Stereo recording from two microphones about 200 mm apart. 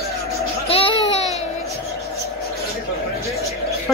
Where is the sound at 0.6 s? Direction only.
30° left (ahead or behind).